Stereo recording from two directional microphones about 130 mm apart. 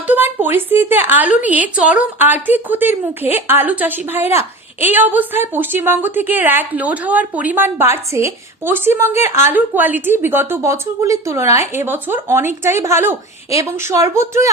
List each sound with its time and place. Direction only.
0.1 s a woman's voice: 15° right (ahead or behind)